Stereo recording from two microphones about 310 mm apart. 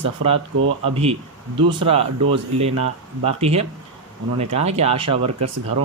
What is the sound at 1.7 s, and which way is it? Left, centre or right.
Speech, centre.